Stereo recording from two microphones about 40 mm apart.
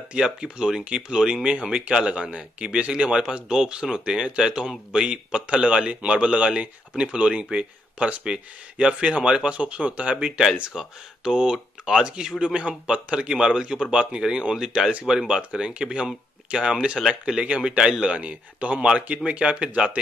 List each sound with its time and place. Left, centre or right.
0.2 s speech: centre
10.1 s speech: centre
18.1 s speech: right